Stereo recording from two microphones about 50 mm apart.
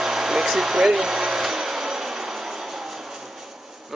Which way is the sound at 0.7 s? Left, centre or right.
Right.